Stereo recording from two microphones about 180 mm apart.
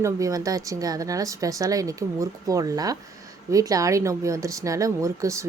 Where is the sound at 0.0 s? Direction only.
20° right (ahead or behind).